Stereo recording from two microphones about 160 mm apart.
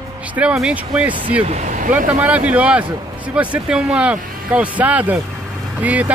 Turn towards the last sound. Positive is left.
turn(degrees=-10)  # may be behind; listen again after turning